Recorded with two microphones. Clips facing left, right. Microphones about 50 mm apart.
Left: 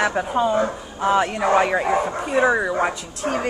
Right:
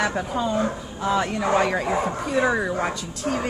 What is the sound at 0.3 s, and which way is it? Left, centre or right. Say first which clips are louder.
Speech: left 4 dB; left.